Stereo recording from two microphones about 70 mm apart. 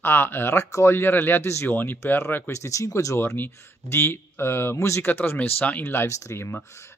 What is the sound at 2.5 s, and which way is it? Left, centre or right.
Speech, left.